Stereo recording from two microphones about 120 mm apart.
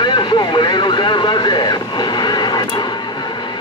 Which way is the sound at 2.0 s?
40° left (ahead or behind).